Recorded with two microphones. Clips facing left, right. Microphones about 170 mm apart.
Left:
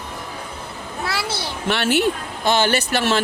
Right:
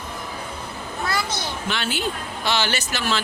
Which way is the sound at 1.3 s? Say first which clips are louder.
Left 2 dB; 10° left (ahead or behind).